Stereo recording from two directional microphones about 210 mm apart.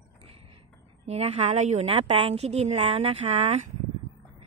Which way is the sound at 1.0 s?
30° right (ahead or behind).